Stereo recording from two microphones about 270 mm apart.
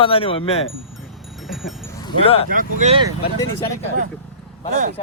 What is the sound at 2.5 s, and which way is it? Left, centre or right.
Speech, right.